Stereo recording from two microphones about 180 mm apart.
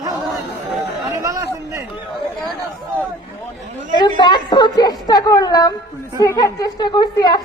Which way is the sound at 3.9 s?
25° left (ahead or behind).